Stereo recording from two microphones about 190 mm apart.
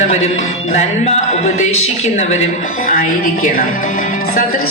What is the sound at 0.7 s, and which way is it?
Speech, 35° left (ahead or behind).